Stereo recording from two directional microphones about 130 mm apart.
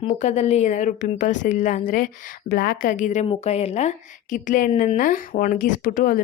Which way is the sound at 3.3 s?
55° left (ahead or behind).